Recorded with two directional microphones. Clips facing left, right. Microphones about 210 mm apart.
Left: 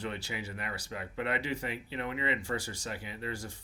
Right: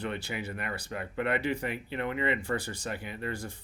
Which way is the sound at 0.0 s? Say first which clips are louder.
Right 3 dB; 55° right (ahead or behind).